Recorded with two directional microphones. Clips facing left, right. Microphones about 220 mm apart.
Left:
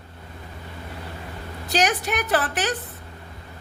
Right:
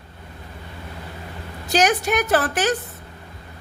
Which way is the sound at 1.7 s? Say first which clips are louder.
Right 4 dB; 45° right (ahead or behind).